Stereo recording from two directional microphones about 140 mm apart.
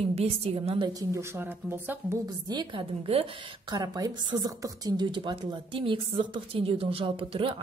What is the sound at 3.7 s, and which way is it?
Speech, 30° right (ahead or behind).